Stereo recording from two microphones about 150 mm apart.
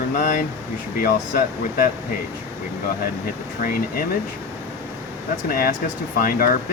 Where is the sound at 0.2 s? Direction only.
65° left (ahead or behind).